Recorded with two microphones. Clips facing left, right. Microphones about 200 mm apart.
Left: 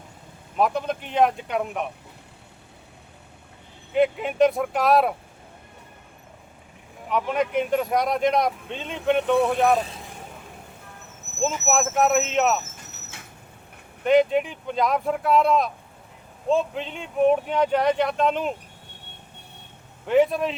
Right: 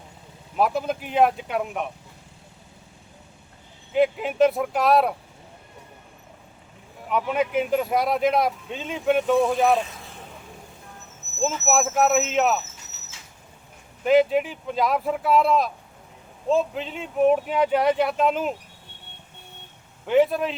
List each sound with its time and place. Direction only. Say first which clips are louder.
0.5 s speech: even; 5° right (ahead or behind)
3.9 s speech: even; centre (ahead or behind)
7.1 s speech: even; 5° right (ahead or behind)
11.6 s speech: right 1 dB; centre (ahead or behind)
12.7 s vehicle: left 4 dB; 55° left (ahead or behind)
14.0 s speech: even; 5° right (ahead or behind)
20.1 s speech: even; centre (ahead or behind)